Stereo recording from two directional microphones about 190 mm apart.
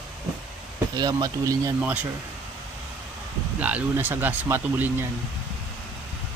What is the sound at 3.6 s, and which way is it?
A man's voice, 10° right (ahead or behind).